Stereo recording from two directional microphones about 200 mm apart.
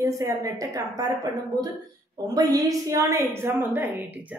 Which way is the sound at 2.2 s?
20° right (ahead or behind).